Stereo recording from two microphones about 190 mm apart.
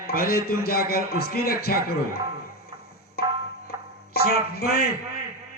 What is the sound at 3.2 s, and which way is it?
Music, 55° left (ahead or behind).